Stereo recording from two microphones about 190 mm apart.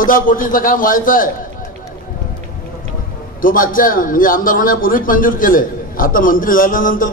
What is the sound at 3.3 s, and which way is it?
A man's voice, 45° left (ahead or behind).